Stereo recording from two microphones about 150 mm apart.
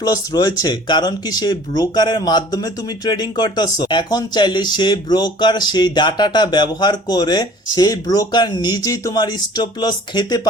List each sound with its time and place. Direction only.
0.0 s speech: 25° left (ahead or behind)